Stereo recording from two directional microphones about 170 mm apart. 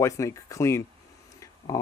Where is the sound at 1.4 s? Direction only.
20° left (ahead or behind).